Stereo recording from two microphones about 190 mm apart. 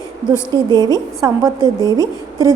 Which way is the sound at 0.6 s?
20° right (ahead or behind).